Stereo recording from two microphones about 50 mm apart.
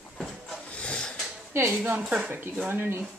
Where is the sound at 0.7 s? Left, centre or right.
Left.